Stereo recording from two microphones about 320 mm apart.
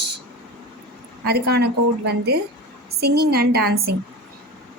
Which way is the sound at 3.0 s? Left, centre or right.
Right.